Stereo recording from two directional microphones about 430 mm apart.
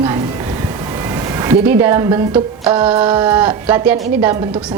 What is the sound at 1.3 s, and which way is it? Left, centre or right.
A woman's voice, centre.